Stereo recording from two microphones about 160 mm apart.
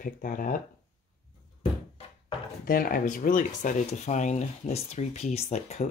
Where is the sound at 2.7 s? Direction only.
65° left (ahead or behind).